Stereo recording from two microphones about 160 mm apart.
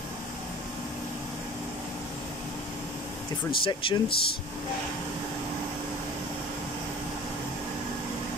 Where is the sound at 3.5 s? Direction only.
30° left (ahead or behind).